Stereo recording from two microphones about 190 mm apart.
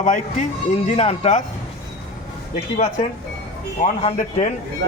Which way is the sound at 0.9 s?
35° left (ahead or behind).